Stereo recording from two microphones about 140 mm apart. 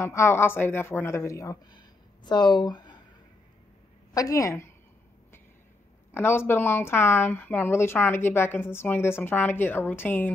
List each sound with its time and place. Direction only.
0.0 s speech: 20° left (ahead or behind)
4.1 s a woman's voice: 25° left (ahead or behind)
6.1 s speech: 15° left (ahead or behind)